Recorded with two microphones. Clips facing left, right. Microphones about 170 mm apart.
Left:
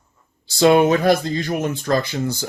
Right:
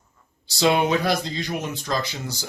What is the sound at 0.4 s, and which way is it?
Speech, 50° left (ahead or behind).